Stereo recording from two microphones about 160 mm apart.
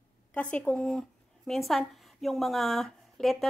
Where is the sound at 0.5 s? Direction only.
5° left (ahead or behind).